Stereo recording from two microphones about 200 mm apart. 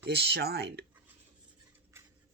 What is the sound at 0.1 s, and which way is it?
Speech, 55° right (ahead or behind).